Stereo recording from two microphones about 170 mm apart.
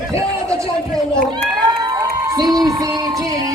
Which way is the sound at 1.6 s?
25° right (ahead or behind).